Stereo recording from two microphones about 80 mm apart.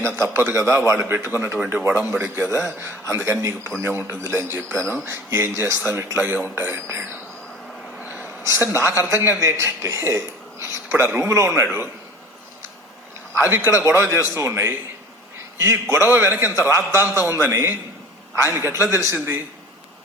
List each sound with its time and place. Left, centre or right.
0.0 s a man's voice: right
1.5 s speech: centre
1.9 s a man's voice: right
7.9 s a sound: centre
8.5 s a man's voice: right
13.4 s a man's voice: right